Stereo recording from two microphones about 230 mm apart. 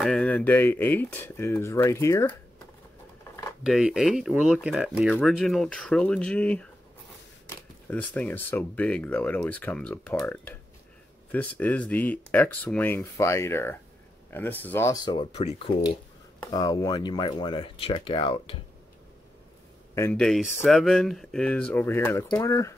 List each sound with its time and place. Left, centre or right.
0.0 s speech: centre
3.6 s speech: centre; by 18.6 s left
20.0 s speech: centre